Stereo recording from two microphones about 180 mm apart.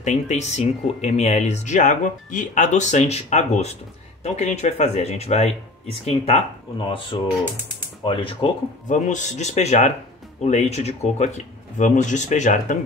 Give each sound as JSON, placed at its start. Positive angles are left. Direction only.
{"t": 0.0, "sound": "speech", "side_deg": 40}
{"t": 8.8, "sound": "speech", "side_deg": 45}